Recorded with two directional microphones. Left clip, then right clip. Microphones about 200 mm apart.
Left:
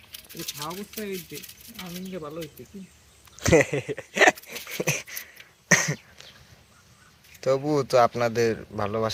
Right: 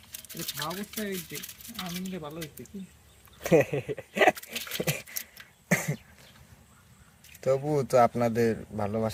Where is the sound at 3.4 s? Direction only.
5° right (ahead or behind).